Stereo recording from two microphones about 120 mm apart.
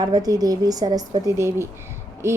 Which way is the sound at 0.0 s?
30° right (ahead or behind).